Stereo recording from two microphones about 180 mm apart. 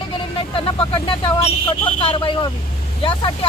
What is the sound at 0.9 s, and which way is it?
Speech, 30° left (ahead or behind).